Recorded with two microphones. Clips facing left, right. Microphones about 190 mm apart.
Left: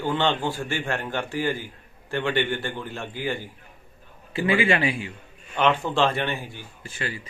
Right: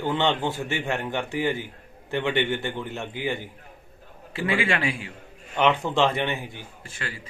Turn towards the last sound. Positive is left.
turn(degrees=-20)  # may be behind; listen again after turning